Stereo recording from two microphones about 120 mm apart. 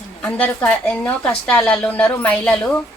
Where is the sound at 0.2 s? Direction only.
10° left (ahead or behind).